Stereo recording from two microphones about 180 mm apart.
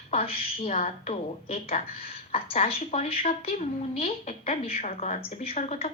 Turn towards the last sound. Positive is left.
turn(degrees=35)  # may be behind; listen again after turning